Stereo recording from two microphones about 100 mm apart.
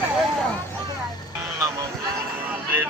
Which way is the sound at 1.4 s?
30° right (ahead or behind).